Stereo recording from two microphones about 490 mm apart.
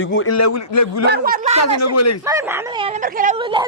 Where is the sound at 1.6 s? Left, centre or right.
Left.